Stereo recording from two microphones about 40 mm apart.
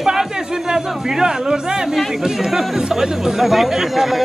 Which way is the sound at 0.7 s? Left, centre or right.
Centre.